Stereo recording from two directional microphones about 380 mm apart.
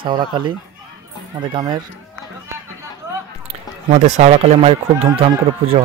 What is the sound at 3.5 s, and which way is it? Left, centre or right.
Speech, centre.